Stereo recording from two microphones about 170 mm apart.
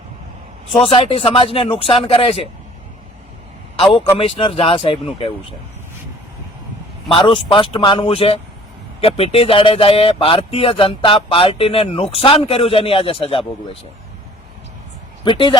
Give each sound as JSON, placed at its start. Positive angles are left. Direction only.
{"t": 0.8, "sound": "speech", "side_deg": 35}
{"t": 4.2, "sound": "speech", "side_deg": 30}
{"t": 7.1, "sound": "speech", "side_deg": 30}
{"t": 15.2, "sound": "speech", "side_deg": 30}